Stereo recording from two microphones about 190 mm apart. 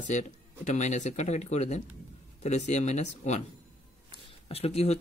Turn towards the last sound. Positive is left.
turn(degrees=35)  # may be behind; listen again after turning